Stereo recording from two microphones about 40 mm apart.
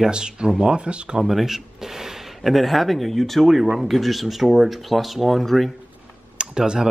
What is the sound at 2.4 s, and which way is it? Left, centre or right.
Speech, centre.